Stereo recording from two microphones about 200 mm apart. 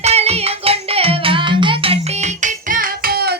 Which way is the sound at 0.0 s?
30° right (ahead or behind).